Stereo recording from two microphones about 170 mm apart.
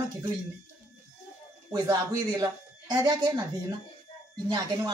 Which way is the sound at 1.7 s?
20° right (ahead or behind).